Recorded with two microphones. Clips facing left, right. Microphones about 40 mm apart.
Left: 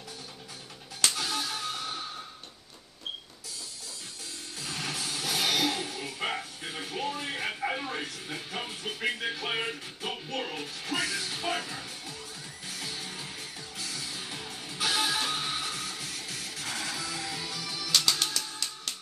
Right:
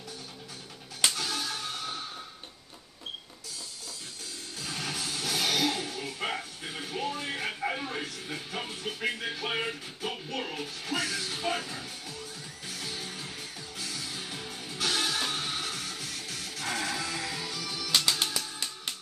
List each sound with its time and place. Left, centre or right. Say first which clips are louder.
1.1 s music: left 1 dB; centre
4.6 s music: even; centre
18.4 s music: even; right